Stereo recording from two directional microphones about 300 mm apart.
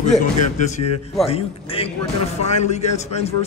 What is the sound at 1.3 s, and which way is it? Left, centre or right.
A man's voice, centre.